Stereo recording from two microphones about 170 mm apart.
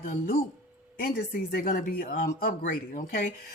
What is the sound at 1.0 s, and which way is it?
Speech, 65° left (ahead or behind).